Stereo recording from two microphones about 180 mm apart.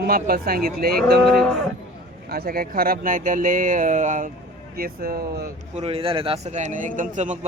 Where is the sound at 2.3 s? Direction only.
55° right (ahead or behind).